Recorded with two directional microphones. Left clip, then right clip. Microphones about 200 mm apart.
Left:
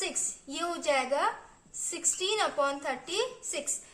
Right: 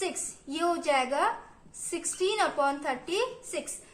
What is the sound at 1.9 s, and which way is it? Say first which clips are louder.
A woman's voice: right 1 dB; 10° left (ahead or behind).